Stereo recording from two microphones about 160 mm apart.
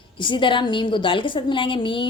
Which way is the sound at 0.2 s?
30° left (ahead or behind).